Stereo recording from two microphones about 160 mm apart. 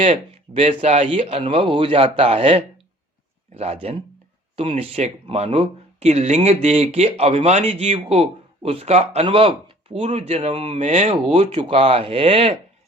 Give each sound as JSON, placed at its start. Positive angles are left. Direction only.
{"t": 0.0, "sound": "speech", "side_deg": -40}